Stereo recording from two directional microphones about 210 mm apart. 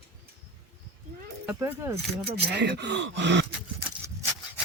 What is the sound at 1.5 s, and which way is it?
Speech, 10° right (ahead or behind).